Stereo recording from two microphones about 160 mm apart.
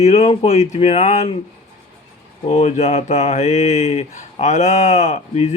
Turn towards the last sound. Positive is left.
turn(degrees=45)  # may be behind; listen again after turning